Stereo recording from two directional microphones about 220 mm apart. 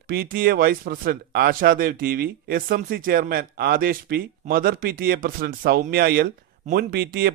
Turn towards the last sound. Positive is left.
turn(degrees=-40)  # may be behind; listen again after turning